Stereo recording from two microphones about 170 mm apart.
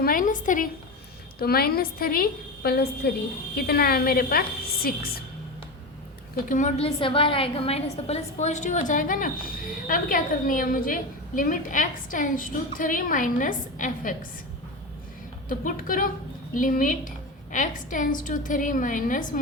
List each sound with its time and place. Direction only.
0.0 s a sound: 55° left (ahead or behind)
1.4 s a woman's voice: 65° left (ahead or behind)
6.5 s a woman's voice: 45° left (ahead or behind)
15.4 s a woman's voice: 55° left (ahead or behind)